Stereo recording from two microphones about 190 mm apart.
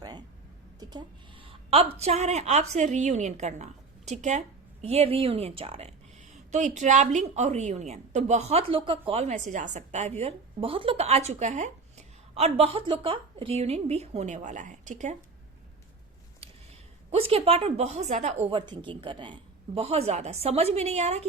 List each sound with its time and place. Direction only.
0.8 s a sound: 20° right (ahead or behind)
2.0 s a woman's voice: 35° right (ahead or behind)
17.1 s a woman's voice: 30° right (ahead or behind)